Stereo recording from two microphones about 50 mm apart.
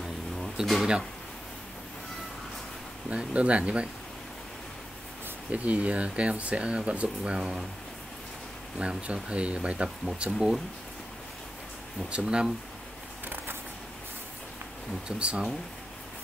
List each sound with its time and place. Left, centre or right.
0.0 s a sound: centre
3.1 s speech: right
5.5 s speech: right
8.7 s speech: right
12.3 s speech: centre
15.0 s speech: right